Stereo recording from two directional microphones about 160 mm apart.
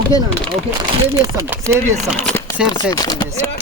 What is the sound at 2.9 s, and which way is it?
Speech, 25° left (ahead or behind).